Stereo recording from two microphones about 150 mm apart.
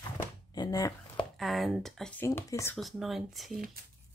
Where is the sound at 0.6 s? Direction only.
25° left (ahead or behind).